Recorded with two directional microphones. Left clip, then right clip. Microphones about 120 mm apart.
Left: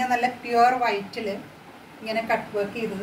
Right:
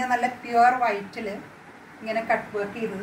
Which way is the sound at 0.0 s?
5° left (ahead or behind).